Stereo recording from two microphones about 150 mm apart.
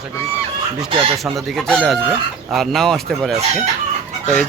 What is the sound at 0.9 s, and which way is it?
Speech, 35° right (ahead or behind).